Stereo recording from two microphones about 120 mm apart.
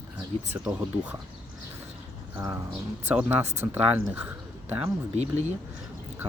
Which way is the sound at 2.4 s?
20° right (ahead or behind).